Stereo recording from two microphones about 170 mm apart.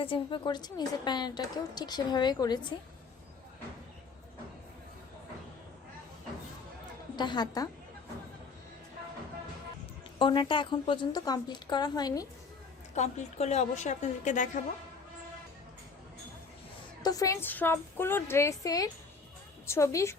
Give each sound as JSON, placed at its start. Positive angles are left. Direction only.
{"t": 0.0, "sound": "a woman's voice", "side_deg": 30}
{"t": 7.2, "sound": "a woman's voice", "side_deg": 25}
{"t": 10.2, "sound": "a woman's voice", "side_deg": 30}
{"t": 12.9, "sound": "a woman's voice", "side_deg": 40}
{"t": 17.0, "sound": "a woman's voice", "side_deg": 20}